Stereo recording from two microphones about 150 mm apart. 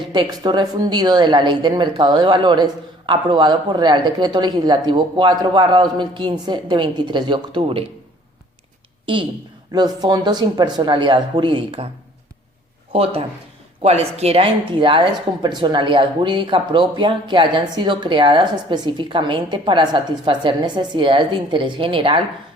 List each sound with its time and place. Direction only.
0.1 s speech: 30° right (ahead or behind)
9.7 s speech: 30° right (ahead or behind)
12.9 s speech: 40° right (ahead or behind)